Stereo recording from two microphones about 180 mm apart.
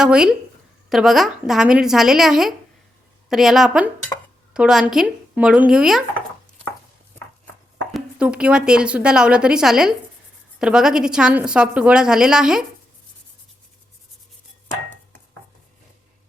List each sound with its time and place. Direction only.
0.0 s a woman's voice: 5° right (ahead or behind)
7.9 s a woman's voice: 5° right (ahead or behind)